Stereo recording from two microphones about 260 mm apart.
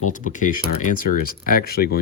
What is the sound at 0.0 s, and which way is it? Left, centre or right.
Speech, left.